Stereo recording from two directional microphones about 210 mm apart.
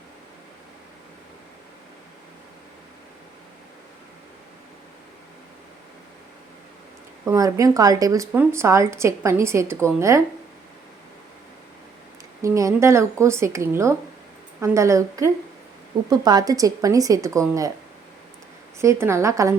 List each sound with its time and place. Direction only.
7.3 s a woman's voice: 15° right (ahead or behind)
12.4 s a woman's voice: 15° right (ahead or behind)
18.8 s a woman's voice: 15° right (ahead or behind)